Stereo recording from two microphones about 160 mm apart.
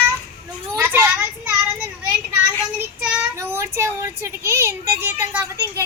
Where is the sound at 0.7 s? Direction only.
10° right (ahead or behind).